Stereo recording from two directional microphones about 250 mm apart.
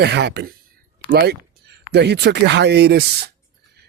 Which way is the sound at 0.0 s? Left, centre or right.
Right.